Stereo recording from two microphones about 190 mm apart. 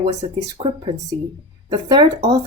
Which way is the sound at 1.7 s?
20° right (ahead or behind).